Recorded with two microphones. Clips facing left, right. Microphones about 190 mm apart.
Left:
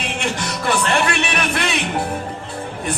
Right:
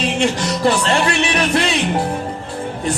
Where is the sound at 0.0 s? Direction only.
55° left (ahead or behind).